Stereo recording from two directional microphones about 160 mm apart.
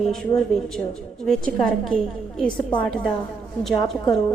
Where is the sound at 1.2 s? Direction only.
Centre (ahead or behind).